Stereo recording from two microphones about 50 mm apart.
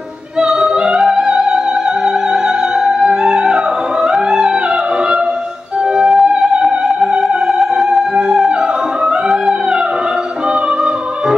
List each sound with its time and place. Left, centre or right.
0.4 s opera: centre
5.9 s music: centre